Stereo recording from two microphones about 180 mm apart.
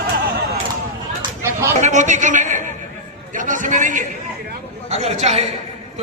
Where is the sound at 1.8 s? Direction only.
40° right (ahead or behind).